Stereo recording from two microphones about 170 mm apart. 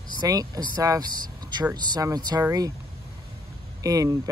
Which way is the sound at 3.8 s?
20° right (ahead or behind).